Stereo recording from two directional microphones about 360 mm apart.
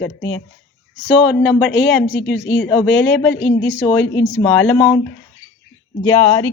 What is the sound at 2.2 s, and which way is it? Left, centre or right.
Speech, left.